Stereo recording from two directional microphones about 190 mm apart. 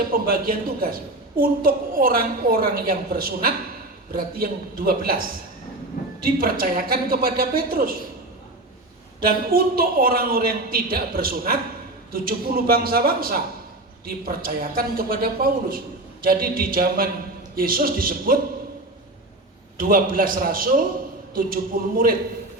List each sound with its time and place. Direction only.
0.1 s a man's voice: 50° right (ahead or behind)
6.2 s a man's voice: 50° right (ahead or behind)
9.2 s a man's voice: 50° right (ahead or behind)
19.7 s a man's voice: 50° right (ahead or behind)